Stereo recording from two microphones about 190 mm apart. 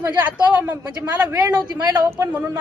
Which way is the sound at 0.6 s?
10° right (ahead or behind).